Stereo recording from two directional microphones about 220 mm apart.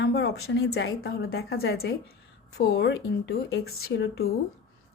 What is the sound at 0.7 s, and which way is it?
Speech, 50° left (ahead or behind).